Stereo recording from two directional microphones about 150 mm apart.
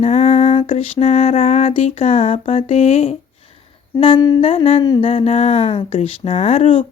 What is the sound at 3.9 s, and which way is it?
Speech, 35° left (ahead or behind).